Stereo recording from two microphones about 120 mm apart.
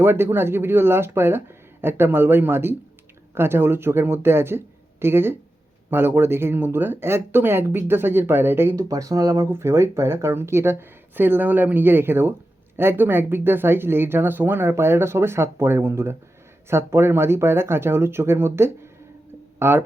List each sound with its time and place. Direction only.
0.0 s speech: 20° right (ahead or behind)